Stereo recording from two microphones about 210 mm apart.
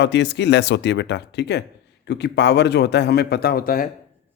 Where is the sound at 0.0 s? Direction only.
55° left (ahead or behind).